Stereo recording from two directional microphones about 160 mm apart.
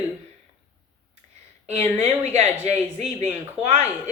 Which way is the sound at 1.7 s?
40° right (ahead or behind).